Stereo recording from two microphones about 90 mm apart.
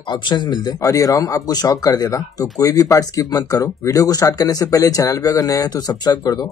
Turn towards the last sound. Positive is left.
turn(degrees=40)  # may be behind; listen again after turning